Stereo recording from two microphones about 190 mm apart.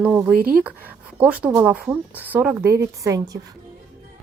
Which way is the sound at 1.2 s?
5° right (ahead or behind).